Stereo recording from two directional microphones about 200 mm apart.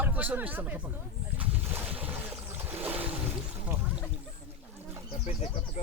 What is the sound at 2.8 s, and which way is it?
Boat, 10° right (ahead or behind).